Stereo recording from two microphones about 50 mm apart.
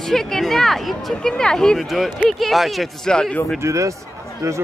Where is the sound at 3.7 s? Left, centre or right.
Right.